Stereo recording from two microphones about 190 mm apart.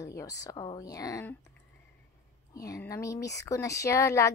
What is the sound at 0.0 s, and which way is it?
Speech, 15° left (ahead or behind).